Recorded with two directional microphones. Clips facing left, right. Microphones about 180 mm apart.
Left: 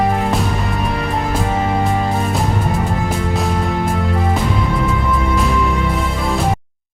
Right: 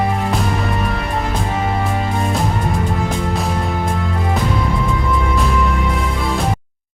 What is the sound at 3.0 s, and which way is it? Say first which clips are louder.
Music: left 1 dB; centre (ahead or behind).